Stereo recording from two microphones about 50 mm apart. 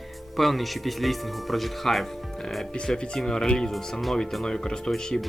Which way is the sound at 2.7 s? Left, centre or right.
Centre.